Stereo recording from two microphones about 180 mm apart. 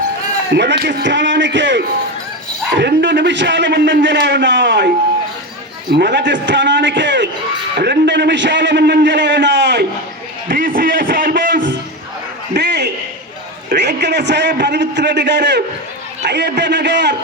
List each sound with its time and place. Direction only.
0.5 s a man's voice: 75° right (ahead or behind)
2.7 s a man's voice: 75° right (ahead or behind)
5.9 s a man's voice: 65° right (ahead or behind)
10.5 s music: 50° right (ahead or behind)
12.5 s a sound: 70° right (ahead or behind)
13.7 s a man's voice: 70° right (ahead or behind)